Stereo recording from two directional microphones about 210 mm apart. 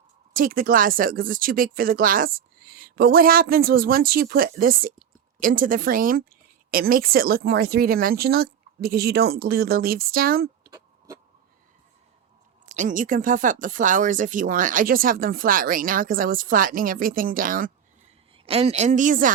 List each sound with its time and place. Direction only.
0.3 s speech: 40° right (ahead or behind)
10.7 s owl: 15° right (ahead or behind)
12.6 s speech: 35° right (ahead or behind)
18.4 s speech: 30° right (ahead or behind)